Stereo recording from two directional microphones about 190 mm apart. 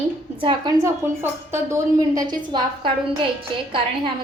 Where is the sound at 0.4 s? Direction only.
20° right (ahead or behind).